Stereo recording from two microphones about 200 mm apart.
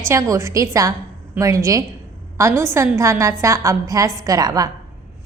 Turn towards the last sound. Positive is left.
turn(degrees=-20)  # may be behind; listen again after turning